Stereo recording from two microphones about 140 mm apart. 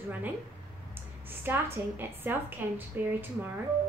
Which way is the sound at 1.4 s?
15° right (ahead or behind).